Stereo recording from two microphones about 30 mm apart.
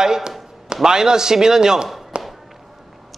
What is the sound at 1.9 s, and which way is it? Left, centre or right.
Chop, centre.